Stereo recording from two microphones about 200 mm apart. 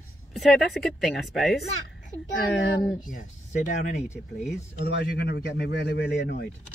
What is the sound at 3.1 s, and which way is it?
Speech, 40° left (ahead or behind).